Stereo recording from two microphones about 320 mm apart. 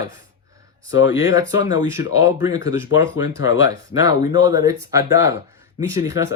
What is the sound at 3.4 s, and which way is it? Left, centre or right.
Speech, left.